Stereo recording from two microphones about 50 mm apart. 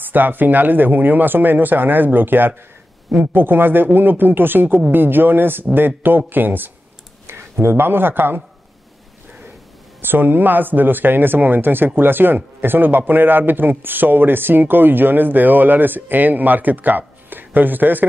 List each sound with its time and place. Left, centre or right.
0.0 s speech: right
7.2 s speech: right
10.0 s speech: right